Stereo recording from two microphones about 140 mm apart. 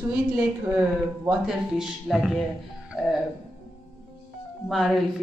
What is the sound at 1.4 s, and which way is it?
Speech, 5° right (ahead or behind).